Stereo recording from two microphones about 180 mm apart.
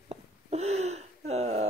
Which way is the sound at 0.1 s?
35° right (ahead or behind).